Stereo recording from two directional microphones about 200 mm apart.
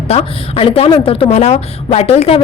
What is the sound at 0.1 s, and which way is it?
A woman's voice, 30° left (ahead or behind).